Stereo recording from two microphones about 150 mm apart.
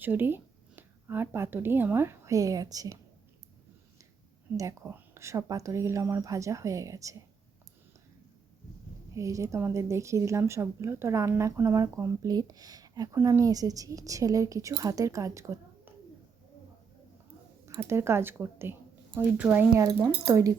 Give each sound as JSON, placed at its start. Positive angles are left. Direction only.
{"t": 0.0, "sound": "speech", "side_deg": -15}
{"t": 4.5, "sound": "a woman's voice", "side_deg": -20}
{"t": 9.1, "sound": "a woman's voice", "side_deg": -20}
{"t": 17.7, "sound": "speech", "side_deg": -20}